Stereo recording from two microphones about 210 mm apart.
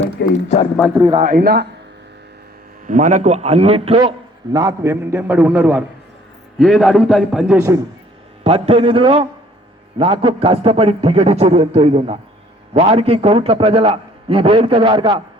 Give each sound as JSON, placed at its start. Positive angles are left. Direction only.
{"t": 0.2, "sound": "a man's voice", "side_deg": 50}
{"t": 1.1, "sound": "a man's voice", "side_deg": -40}
{"t": 2.8, "sound": "a man's voice", "side_deg": -35}
{"t": 4.5, "sound": "a man's voice", "side_deg": -15}
{"t": 8.4, "sound": "a man's voice", "side_deg": -30}